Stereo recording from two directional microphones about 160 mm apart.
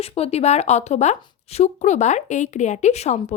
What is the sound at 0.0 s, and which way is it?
A woman's voice, 40° left (ahead or behind).